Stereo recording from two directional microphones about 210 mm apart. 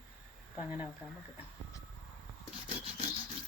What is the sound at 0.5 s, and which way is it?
Speech, 10° right (ahead or behind).